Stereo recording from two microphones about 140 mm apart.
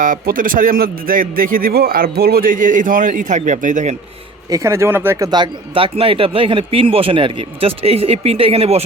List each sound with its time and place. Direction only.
0.0 s a man's voice: 75° right (ahead or behind)
4.4 s speech: 20° right (ahead or behind)
5.3 s speech: 35° right (ahead or behind)